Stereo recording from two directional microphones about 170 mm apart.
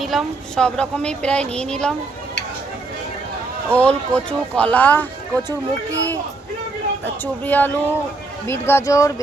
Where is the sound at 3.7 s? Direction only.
5° left (ahead or behind).